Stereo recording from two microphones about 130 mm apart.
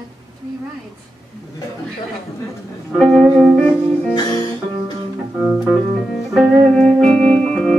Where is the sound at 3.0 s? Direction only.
Centre (ahead or behind).